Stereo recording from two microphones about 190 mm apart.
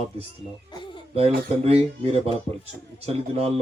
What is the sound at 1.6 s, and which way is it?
Speech, 35° right (ahead or behind).